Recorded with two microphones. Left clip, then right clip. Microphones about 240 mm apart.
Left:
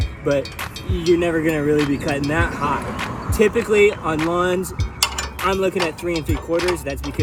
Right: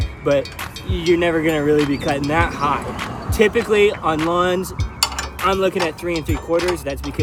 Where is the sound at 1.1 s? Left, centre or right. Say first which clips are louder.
Right 2 dB; centre.